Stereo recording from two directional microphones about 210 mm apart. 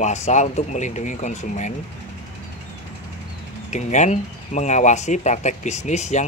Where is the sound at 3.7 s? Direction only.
35° left (ahead or behind).